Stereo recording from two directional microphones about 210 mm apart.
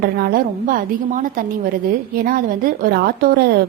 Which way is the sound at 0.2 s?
45° right (ahead or behind).